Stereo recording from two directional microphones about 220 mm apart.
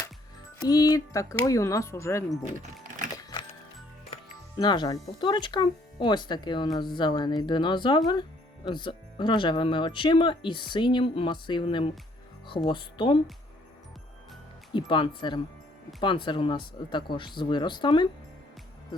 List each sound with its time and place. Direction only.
0.7 s speech: 15° left (ahead or behind)
4.1 s speech: 20° left (ahead or behind)
14.7 s speech: 20° left (ahead or behind)